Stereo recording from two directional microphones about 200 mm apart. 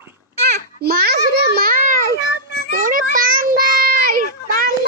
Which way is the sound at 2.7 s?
45° right (ahead or behind).